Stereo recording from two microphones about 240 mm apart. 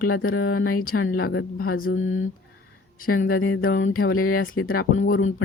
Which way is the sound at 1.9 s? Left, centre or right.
Left.